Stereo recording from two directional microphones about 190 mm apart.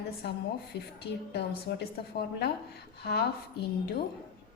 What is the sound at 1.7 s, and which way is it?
Speech, 60° left (ahead or behind).